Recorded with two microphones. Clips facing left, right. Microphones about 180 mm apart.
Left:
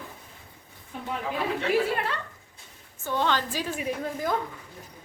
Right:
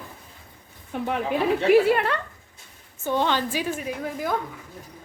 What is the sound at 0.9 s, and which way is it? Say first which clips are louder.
A woman's voice: right 6 dB; 70° right (ahead or behind).